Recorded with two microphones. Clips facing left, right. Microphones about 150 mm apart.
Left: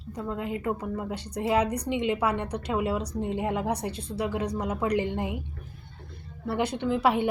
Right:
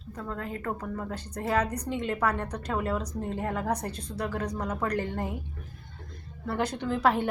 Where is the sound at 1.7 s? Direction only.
70° left (ahead or behind).